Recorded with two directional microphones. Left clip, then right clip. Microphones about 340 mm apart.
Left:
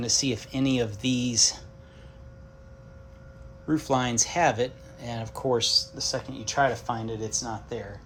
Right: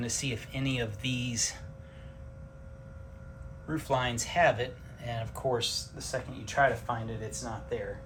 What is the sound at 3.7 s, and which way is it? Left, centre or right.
Speech, centre.